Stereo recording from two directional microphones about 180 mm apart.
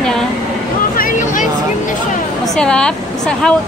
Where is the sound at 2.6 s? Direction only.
5° left (ahead or behind).